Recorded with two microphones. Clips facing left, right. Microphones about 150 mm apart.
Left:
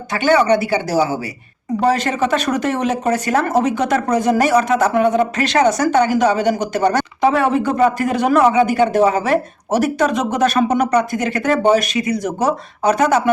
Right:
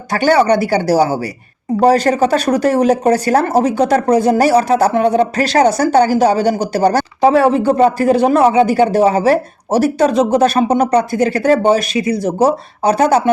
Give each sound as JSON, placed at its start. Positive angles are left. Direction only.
{"t": 0.1, "sound": "speech", "side_deg": -35}